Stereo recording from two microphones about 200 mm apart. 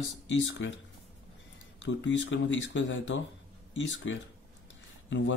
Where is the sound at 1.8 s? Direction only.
70° left (ahead or behind).